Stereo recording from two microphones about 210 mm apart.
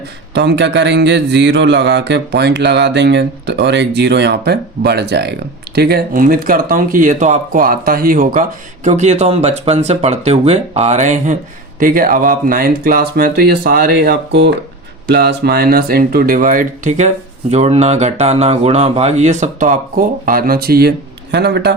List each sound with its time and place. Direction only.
0.3 s speech: 55° right (ahead or behind)